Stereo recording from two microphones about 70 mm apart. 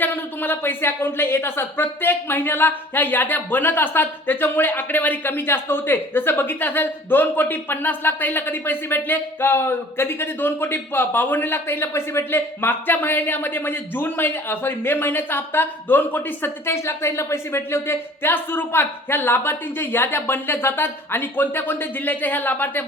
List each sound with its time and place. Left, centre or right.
0.0 s speech: left